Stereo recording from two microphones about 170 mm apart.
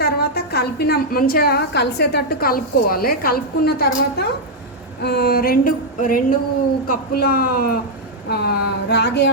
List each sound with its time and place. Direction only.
0.0 s a woman's voice: 65° left (ahead or behind)
8.3 s speech: 75° left (ahead or behind)